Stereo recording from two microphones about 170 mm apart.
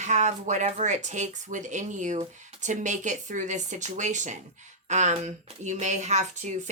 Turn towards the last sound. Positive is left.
turn(degrees=-45)  # may be behind; listen again after turning